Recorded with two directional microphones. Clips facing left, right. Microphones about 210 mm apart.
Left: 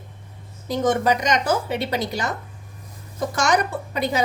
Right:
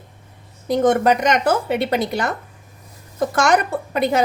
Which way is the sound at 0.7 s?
55° right (ahead or behind).